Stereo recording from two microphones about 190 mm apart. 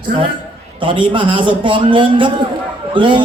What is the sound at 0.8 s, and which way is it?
A man's voice, 25° right (ahead or behind).